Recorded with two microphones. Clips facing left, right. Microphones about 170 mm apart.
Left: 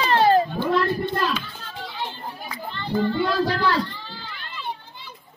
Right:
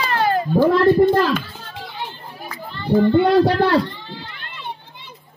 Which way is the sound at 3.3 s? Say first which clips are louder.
Right 8 dB; 60° right (ahead or behind).